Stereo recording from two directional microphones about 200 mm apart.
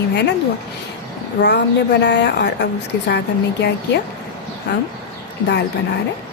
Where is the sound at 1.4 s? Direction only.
60° left (ahead or behind).